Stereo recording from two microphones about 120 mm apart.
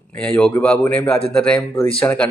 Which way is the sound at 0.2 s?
10° left (ahead or behind).